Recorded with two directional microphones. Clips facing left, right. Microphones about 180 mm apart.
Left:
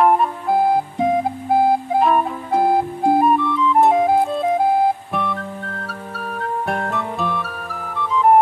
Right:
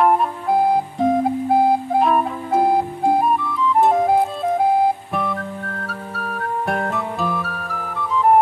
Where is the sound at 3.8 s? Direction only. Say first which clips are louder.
Left 1 dB; centre (ahead or behind).